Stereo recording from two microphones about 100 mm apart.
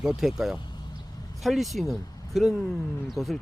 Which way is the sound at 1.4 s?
Centre (ahead or behind).